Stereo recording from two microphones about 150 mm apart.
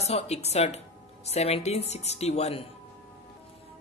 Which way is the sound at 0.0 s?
45° left (ahead or behind).